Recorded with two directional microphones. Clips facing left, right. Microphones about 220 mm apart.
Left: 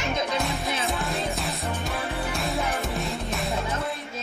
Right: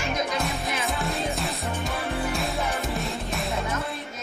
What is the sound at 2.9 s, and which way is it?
Music, centre (ahead or behind).